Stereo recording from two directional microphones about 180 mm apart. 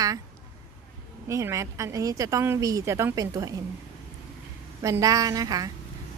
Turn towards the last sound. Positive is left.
turn(degrees=-20)  # may be behind; listen again after turning